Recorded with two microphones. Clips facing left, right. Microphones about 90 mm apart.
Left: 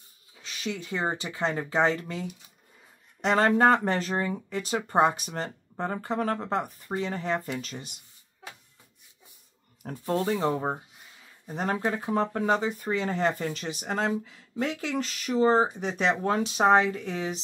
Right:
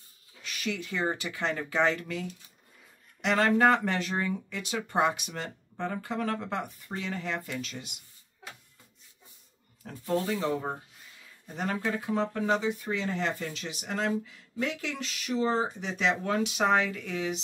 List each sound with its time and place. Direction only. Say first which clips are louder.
0.4 s speech: even; 25° left (ahead or behind)
9.8 s speech: left 2 dB; 40° left (ahead or behind)